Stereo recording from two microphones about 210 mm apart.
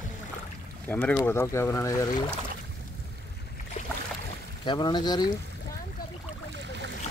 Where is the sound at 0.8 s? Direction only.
10° left (ahead or behind).